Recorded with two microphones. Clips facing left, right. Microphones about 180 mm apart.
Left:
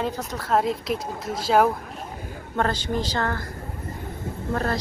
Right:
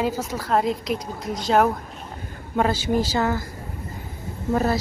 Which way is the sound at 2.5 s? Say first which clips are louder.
Right 4 dB; 10° right (ahead or behind).